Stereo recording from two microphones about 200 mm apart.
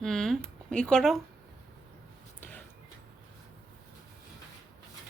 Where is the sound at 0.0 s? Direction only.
Centre (ahead or behind).